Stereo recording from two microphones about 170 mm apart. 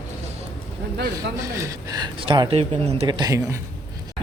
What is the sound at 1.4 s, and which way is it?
Speech, 15° right (ahead or behind).